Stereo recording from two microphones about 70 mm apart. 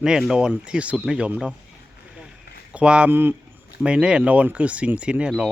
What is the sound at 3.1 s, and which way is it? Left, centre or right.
Speech, right.